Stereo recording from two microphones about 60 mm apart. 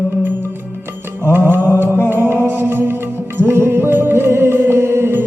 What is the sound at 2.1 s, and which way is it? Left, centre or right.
Music, right.